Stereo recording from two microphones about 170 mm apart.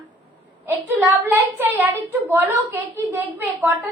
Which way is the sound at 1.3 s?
10° right (ahead or behind).